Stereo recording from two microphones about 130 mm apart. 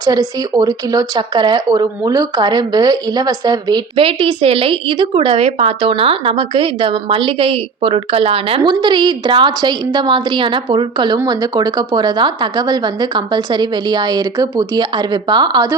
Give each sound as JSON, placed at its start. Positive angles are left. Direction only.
{"t": 0.0, "sound": "speech", "side_deg": -30}
{"t": 8.6, "sound": "speech", "side_deg": -35}